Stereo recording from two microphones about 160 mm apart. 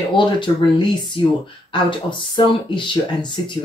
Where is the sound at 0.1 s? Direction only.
30° left (ahead or behind).